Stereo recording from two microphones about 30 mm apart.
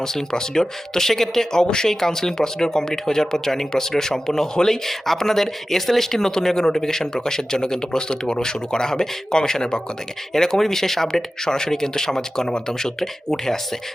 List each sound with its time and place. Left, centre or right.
0.0 s speech: centre